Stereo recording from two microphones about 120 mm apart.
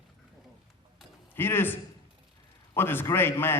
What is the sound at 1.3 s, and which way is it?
A man's voice, 20° left (ahead or behind).